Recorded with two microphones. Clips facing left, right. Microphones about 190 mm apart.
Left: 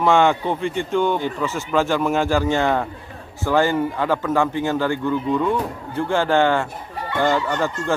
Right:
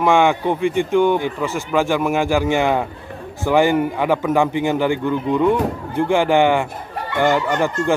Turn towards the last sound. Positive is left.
turn(degrees=-15)  # may be behind; listen again after turning